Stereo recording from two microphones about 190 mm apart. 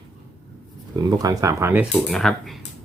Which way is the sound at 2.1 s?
Centre (ahead or behind).